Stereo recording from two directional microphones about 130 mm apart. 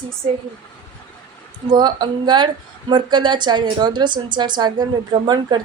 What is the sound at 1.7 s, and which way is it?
A woman's voice, 35° right (ahead or behind).